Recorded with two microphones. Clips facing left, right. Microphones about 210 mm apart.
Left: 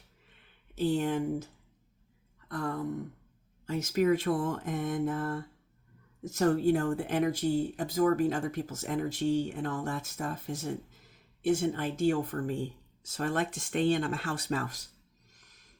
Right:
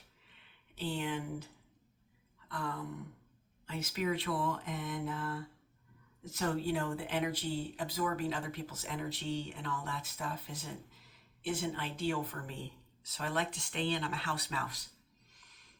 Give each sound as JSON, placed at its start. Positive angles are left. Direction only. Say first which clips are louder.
{"t": 0.8, "sound": "speech", "louder": "left 9 dB", "side_deg": 45}
{"t": 2.5, "sound": "throat clearing", "louder": "left 6 dB", "side_deg": 45}
{"t": 3.7, "sound": "speech", "louder": "left 9 dB", "side_deg": 45}
{"t": 15.4, "sound": "a sound", "louder": "left 2 dB", "side_deg": 45}